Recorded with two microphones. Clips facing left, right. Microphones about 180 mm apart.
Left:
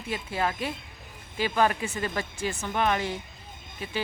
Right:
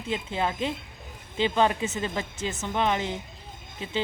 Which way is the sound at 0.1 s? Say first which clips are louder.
Right 1 dB; 20° right (ahead or behind).